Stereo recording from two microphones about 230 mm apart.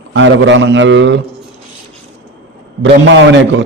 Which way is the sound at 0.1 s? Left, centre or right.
Right.